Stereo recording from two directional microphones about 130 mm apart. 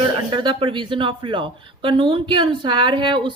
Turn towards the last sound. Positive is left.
turn(degrees=-40)  # may be behind; listen again after turning